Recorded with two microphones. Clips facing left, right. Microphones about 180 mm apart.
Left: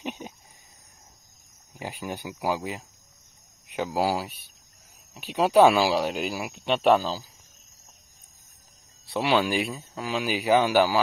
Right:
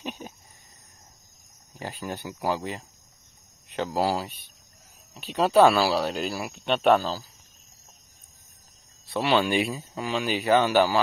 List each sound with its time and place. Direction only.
0.0 s a sound: 20° left (ahead or behind)
1.7 s speech: 15° left (ahead or behind)
9.1 s speech: 10° left (ahead or behind)